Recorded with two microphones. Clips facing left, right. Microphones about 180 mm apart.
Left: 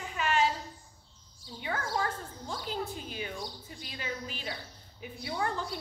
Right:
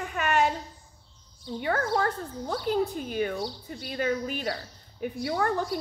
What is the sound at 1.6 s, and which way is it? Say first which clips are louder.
A woman's voice: right 7 dB; 55° right (ahead or behind).